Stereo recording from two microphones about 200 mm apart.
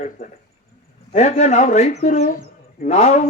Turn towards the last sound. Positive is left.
turn(degrees=35)  # may be behind; listen again after turning